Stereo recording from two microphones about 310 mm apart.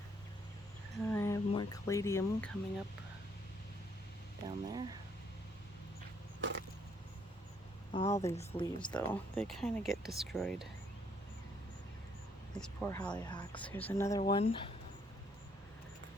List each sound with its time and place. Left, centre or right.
1.1 s speech: centre
4.4 s speech: centre
6.4 s a sound: right
7.9 s speech: centre
12.5 s speech: centre